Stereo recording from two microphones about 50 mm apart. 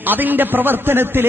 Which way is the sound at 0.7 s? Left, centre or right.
Right.